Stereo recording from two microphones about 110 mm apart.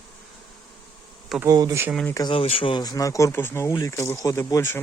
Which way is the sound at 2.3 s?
55° left (ahead or behind).